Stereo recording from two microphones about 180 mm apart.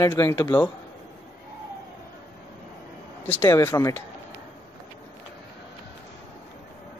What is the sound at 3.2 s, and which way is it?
Speech, 10° left (ahead or behind).